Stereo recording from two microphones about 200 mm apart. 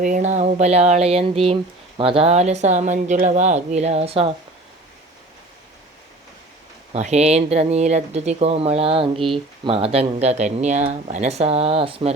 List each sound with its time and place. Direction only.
0.0 s speech: 40° right (ahead or behind)
6.9 s speech: 35° right (ahead or behind)